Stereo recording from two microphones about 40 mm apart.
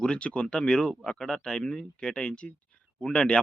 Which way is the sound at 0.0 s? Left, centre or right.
Left.